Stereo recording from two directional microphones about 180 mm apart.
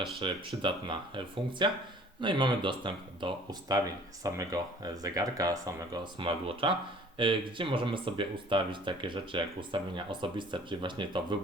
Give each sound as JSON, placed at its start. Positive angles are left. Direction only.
{"t": 0.2, "sound": "speech", "side_deg": -25}